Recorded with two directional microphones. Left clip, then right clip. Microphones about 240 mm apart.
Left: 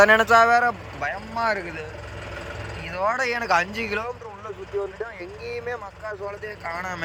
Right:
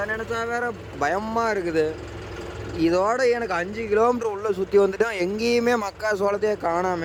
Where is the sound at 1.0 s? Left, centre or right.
Right.